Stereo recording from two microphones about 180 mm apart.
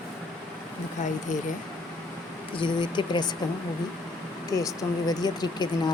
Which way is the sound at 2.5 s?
25° left (ahead or behind).